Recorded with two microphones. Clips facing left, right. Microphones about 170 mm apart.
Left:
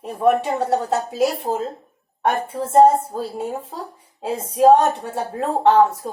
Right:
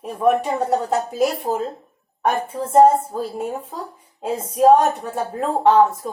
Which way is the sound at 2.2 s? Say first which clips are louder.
Even; 30° left (ahead or behind).